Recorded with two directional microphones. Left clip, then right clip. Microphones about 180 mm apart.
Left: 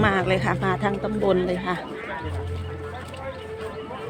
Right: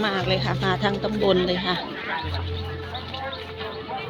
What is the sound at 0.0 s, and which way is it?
Speech, 20° left (ahead or behind).